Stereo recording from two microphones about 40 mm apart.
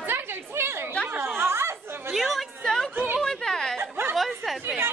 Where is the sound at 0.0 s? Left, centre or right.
Right.